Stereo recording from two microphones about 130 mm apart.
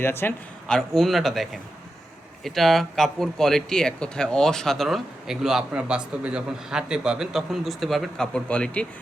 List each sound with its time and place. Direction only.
0.0 s speech: 20° left (ahead or behind)
0.7 s speech: 5° left (ahead or behind)